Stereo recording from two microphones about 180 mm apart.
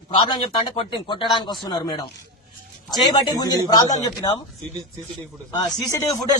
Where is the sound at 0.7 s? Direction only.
25° left (ahead or behind).